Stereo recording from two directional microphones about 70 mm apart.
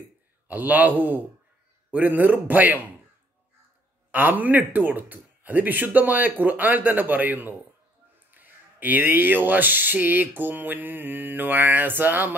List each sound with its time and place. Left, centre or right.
0.5 s speech: right
4.1 s speech: right